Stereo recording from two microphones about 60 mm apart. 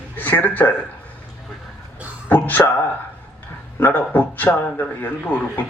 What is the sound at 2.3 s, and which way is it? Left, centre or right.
Speech, left.